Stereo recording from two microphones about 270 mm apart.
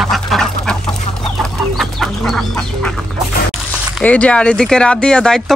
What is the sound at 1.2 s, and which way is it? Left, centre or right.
Chicken, centre.